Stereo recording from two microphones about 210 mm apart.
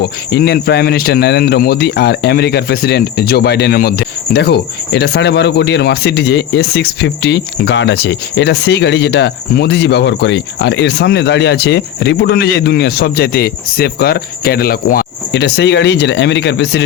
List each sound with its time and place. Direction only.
0.0 s speech: 50° left (ahead or behind)